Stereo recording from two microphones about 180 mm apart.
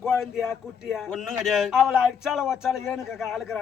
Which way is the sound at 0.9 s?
Centre (ahead or behind).